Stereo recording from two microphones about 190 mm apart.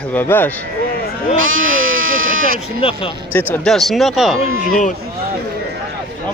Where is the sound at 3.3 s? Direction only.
5° left (ahead or behind).